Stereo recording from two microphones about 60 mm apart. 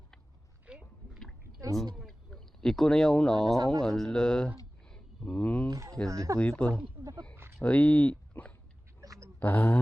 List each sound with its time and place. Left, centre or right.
0.7 s rowboat: centre
2.0 s speech: centre
4.9 s a sound: centre
5.4 s speech: left
5.7 s speech: right
6.1 s speech: right
6.4 s speech: left
7.0 s speech: right
7.6 s speech: left
9.0 s a sound: right
9.4 s a sound: left